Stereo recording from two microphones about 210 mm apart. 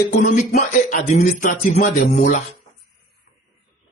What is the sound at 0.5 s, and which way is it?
Speech, 35° left (ahead or behind).